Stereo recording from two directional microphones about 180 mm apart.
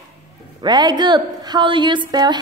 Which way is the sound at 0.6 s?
25° right (ahead or behind).